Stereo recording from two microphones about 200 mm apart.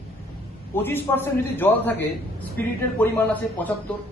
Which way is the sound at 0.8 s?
10° left (ahead or behind).